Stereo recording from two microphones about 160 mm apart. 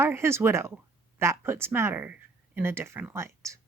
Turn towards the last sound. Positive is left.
turn(degrees=-15)  # may be behind; listen again after turning